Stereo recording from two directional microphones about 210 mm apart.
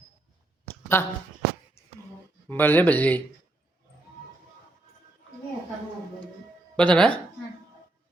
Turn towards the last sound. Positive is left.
turn(degrees=5)  # may be behind; listen again after turning